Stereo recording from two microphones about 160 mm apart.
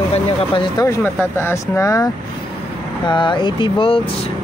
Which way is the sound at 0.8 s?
15° left (ahead or behind).